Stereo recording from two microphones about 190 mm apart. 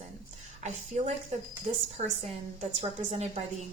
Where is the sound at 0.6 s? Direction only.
35° right (ahead or behind).